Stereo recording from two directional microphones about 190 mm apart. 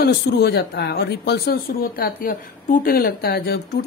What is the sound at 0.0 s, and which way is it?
A woman's voice, 60° left (ahead or behind).